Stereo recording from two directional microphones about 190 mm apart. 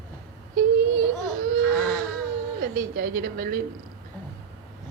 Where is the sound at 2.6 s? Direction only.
50° right (ahead or behind).